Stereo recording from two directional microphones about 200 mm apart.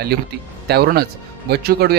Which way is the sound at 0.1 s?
50° right (ahead or behind).